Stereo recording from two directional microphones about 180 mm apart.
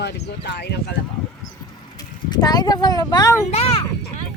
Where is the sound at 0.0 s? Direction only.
70° left (ahead or behind).